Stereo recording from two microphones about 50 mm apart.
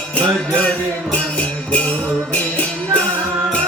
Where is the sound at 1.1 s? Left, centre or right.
Left.